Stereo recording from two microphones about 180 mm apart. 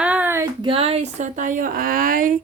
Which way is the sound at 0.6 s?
30° right (ahead or behind).